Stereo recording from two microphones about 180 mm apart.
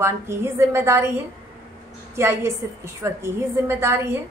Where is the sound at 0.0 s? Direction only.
15° right (ahead or behind).